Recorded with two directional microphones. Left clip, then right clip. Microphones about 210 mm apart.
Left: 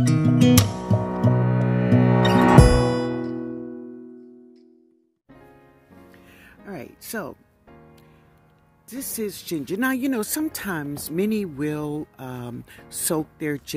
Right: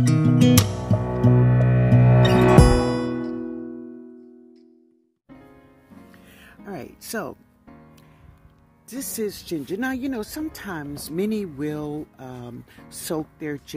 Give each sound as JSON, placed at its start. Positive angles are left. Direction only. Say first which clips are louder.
{"t": 0.0, "sound": "music", "louder": "even", "side_deg": 0}
{"t": 6.1, "sound": "music", "louder": "right 1 dB", "side_deg": 0}
{"t": 8.8, "sound": "speech", "louder": "right 2 dB", "side_deg": 0}
{"t": 9.3, "sound": "speech", "louder": "left 1 dB", "side_deg": 20}